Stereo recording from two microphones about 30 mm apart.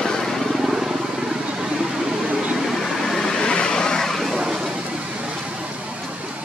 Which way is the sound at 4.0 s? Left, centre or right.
Centre.